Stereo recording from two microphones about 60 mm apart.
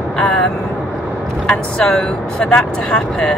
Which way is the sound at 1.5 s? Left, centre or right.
Centre.